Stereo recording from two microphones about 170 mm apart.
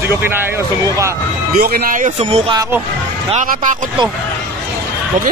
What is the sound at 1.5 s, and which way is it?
Speech, 60° right (ahead or behind).